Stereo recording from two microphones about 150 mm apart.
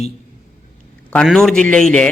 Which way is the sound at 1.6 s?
10° left (ahead or behind).